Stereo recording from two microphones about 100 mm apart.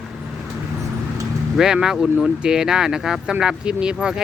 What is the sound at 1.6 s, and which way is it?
Speech, 5° right (ahead or behind).